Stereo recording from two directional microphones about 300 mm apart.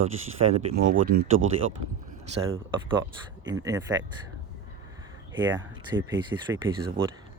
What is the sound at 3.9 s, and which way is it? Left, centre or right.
Speech, centre.